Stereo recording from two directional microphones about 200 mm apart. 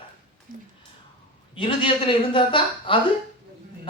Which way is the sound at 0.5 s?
40° right (ahead or behind).